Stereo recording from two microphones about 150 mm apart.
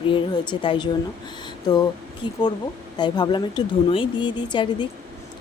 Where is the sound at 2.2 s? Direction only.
30° left (ahead or behind).